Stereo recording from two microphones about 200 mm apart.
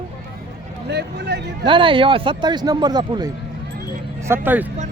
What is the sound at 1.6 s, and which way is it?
Speech, 25° right (ahead or behind).